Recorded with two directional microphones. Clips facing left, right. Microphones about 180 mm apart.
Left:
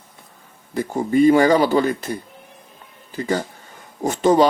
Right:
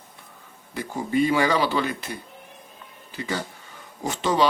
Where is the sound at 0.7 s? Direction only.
45° left (ahead or behind).